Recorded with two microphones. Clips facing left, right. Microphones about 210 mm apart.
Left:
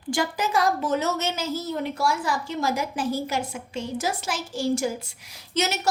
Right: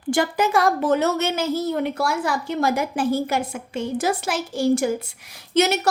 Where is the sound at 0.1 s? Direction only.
55° right (ahead or behind).